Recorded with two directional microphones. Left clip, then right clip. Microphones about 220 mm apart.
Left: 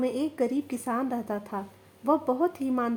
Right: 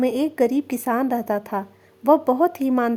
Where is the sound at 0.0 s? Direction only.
50° right (ahead or behind).